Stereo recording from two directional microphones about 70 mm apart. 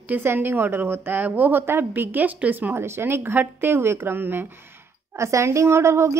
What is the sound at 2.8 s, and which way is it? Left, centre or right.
Speech, right.